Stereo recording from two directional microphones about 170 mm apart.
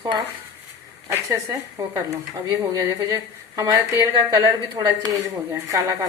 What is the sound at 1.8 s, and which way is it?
Speech, 20° right (ahead or behind).